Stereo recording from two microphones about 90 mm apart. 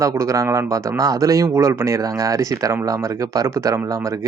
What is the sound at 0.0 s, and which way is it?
Speech, 35° right (ahead or behind).